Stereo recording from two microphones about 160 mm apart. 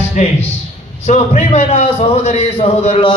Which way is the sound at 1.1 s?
45° left (ahead or behind).